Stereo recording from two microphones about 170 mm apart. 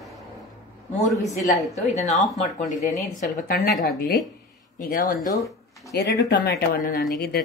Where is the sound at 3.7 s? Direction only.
Centre (ahead or behind).